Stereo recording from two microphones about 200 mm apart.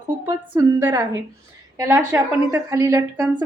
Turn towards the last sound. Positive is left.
turn(degrees=-15)  # may be behind; listen again after turning